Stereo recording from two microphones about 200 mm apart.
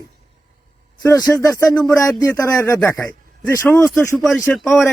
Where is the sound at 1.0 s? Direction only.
15° left (ahead or behind).